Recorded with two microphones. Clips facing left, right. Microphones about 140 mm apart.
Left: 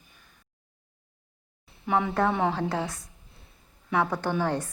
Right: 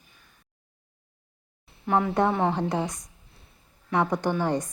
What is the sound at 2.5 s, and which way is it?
A woman's voice, 15° right (ahead or behind).